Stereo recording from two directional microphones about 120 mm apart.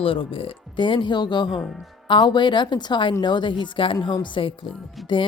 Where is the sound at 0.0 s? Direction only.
50° left (ahead or behind).